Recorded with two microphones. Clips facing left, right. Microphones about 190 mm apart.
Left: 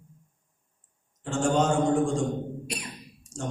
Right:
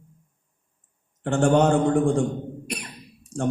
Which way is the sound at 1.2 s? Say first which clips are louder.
Right 5 dB; 60° right (ahead or behind).